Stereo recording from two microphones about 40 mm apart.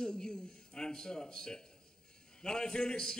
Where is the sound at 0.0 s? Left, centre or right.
Centre.